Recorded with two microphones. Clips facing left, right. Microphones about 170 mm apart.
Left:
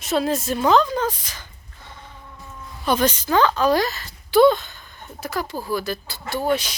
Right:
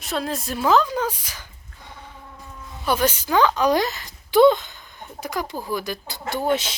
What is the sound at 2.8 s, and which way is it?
A woman's voice, 10° right (ahead or behind).